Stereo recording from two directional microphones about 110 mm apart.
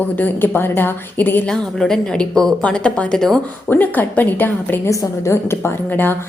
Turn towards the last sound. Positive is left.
turn(degrees=20)  # may be behind; listen again after turning